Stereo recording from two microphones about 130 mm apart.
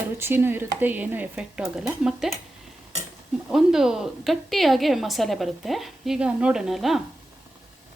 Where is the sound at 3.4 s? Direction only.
5° right (ahead or behind).